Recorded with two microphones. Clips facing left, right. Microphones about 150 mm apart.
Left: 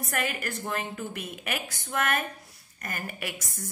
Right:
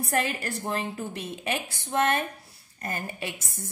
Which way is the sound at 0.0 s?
30° right (ahead or behind).